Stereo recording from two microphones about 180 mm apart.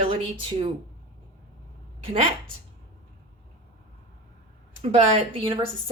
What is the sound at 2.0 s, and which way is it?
Speech, 35° right (ahead or behind).